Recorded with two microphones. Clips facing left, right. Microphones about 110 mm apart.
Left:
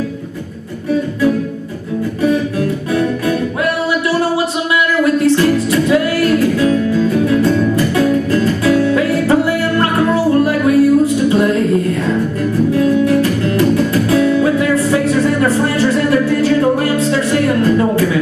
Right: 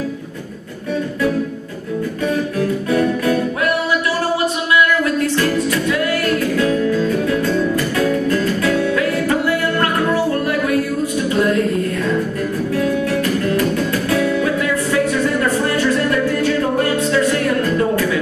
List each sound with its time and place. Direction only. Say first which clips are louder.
5.2 s music: left 5 dB; 20° left (ahead or behind)
8.9 s music: left 5 dB; 25° left (ahead or behind)